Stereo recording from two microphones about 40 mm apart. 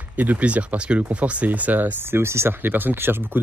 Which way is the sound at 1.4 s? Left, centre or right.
Right.